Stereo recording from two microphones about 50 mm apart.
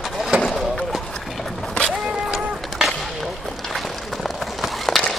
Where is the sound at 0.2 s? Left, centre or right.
Centre.